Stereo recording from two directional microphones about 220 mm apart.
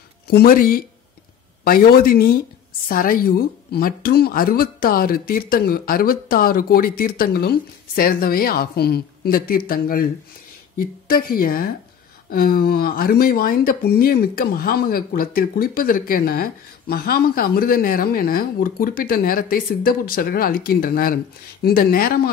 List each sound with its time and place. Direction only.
0.3 s a woman's voice: 45° left (ahead or behind)